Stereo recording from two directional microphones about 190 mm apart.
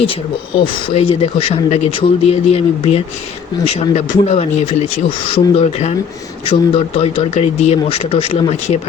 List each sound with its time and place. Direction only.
0.1 s speech: 25° left (ahead or behind)